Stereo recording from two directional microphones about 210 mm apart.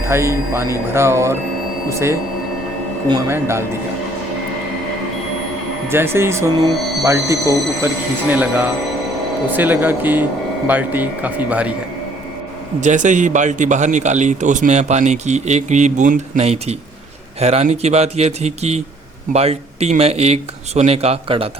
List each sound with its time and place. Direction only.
0.1 s speech: 10° right (ahead or behind)
3.1 s speech: 15° right (ahead or behind)
5.9 s speech: 10° right (ahead or behind)
12.8 s a man's voice: 35° right (ahead or behind)